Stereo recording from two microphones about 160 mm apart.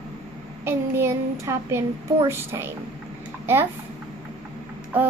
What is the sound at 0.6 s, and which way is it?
A woman's voice, 15° right (ahead or behind).